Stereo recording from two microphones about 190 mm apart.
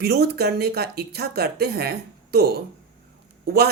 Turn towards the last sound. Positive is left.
turn(degrees=-55)  # may be behind; listen again after turning